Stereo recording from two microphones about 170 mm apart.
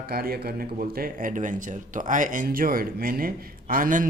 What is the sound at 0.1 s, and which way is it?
A man's voice, 65° right (ahead or behind).